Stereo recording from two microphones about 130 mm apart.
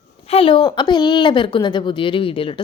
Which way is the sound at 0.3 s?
45° left (ahead or behind).